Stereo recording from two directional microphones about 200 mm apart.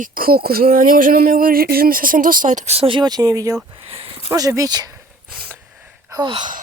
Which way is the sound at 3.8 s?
30° right (ahead or behind).